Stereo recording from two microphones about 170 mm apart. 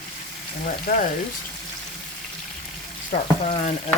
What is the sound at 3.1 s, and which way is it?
Frying, 40° left (ahead or behind).